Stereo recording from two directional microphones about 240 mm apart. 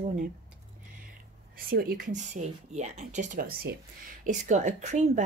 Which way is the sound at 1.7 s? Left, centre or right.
Right.